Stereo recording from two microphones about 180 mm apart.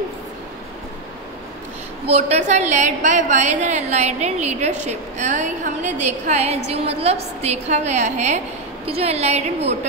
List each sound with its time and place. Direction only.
2.0 s a woman's voice: 35° right (ahead or behind)